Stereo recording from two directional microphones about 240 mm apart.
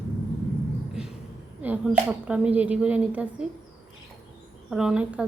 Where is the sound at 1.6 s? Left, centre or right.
Centre.